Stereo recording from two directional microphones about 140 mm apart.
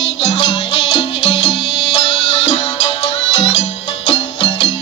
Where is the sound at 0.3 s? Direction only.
40° left (ahead or behind).